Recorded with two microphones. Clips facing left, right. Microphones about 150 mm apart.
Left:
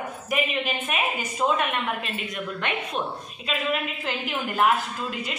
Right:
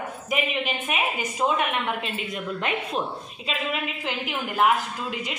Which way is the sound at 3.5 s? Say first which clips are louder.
Left 2 dB; 15° right (ahead or behind).